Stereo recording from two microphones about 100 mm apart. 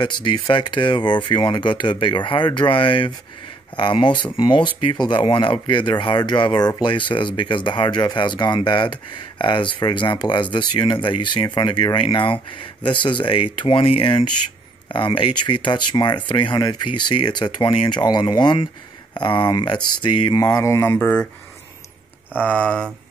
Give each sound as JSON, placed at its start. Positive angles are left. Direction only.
{"t": 0.0, "sound": "speech", "side_deg": 55}
{"t": 20.3, "sound": "mantra", "side_deg": 40}
{"t": 21.0, "sound": "speech", "side_deg": 10}
{"t": 22.4, "sound": "speech", "side_deg": 15}